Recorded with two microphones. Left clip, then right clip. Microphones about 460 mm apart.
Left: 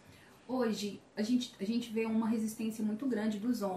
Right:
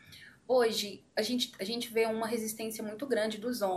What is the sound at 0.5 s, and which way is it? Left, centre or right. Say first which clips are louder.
Speech: right 7 dB; right.